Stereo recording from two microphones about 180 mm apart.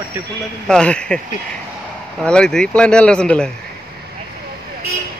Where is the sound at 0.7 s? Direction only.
5° left (ahead or behind).